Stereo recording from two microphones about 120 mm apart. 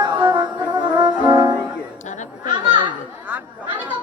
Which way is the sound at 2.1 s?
90° left.